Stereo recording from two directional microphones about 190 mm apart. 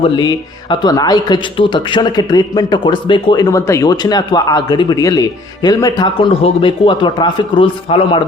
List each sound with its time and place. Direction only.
0.0 s speech: 25° left (ahead or behind)